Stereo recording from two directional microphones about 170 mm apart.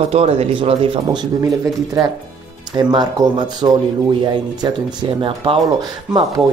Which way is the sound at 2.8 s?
25° right (ahead or behind).